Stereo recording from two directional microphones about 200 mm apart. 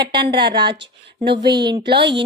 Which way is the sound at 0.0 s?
25° right (ahead or behind).